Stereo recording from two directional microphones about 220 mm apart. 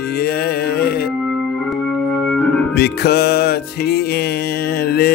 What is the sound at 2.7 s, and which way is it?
Music, 45° left (ahead or behind).